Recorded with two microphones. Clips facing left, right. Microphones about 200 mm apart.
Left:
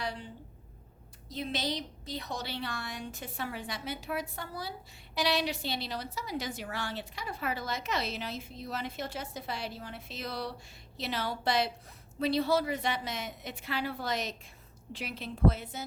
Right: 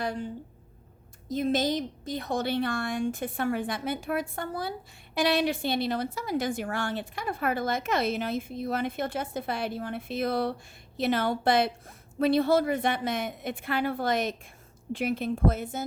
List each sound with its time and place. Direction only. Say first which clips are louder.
0.0 s a woman's voice: right 6 dB; 50° right (ahead or behind)
1.3 s a woman's voice: right 9 dB; 45° right (ahead or behind)